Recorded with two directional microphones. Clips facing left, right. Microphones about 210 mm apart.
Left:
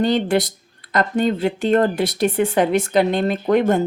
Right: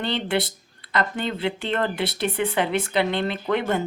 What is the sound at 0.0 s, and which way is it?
Speech, 45° left (ahead or behind).